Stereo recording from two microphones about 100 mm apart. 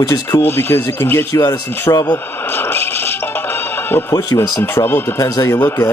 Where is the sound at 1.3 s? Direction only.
40° left (ahead or behind).